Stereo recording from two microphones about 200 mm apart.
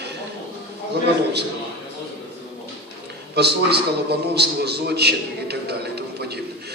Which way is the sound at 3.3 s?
55° right (ahead or behind).